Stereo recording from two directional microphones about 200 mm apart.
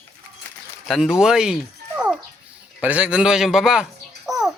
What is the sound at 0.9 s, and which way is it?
Speech, centre (ahead or behind).